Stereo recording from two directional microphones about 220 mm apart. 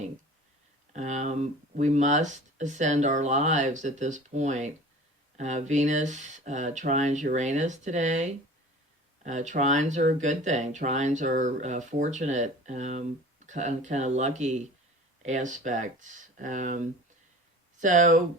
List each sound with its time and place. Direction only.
0.9 s speech: 35° right (ahead or behind)